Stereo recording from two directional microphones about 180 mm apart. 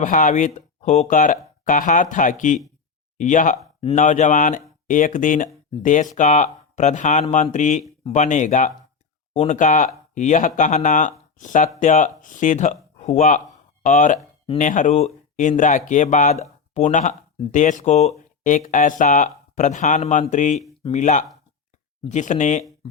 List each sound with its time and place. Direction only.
0.0 s speech: 45° left (ahead or behind)